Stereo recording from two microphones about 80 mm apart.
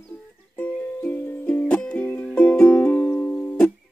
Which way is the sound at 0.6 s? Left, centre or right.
Left.